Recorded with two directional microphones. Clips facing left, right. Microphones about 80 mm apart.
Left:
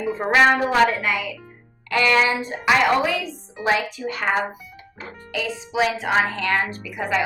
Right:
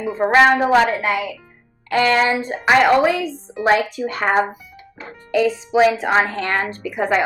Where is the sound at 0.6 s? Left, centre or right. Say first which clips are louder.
Right 3 dB; right.